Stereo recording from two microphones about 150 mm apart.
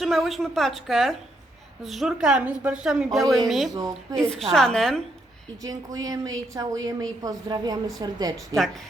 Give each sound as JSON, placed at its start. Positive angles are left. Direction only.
{"t": 0.0, "sound": "speech", "side_deg": 0}
{"t": 5.6, "sound": "speech", "side_deg": -25}
{"t": 8.5, "sound": "speech", "side_deg": 0}